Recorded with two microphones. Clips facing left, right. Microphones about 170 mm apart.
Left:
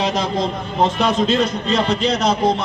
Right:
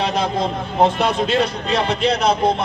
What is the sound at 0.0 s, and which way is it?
A man's voice, 55° right (ahead or behind).